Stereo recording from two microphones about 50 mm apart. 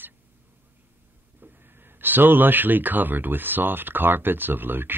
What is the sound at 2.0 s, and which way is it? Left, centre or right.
A man's voice, right.